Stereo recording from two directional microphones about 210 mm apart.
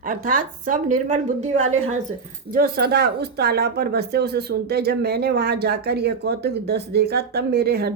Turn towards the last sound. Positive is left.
turn(degrees=-50)  # may be behind; listen again after turning